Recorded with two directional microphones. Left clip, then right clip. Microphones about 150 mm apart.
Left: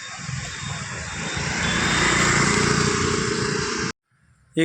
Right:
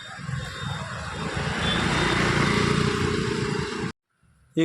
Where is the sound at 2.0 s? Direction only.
50° left (ahead or behind); by 2.9 s 35° left (ahead or behind).